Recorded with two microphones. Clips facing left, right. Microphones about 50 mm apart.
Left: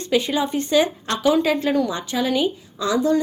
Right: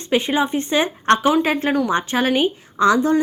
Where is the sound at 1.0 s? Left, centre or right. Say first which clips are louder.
Right 3 dB; right.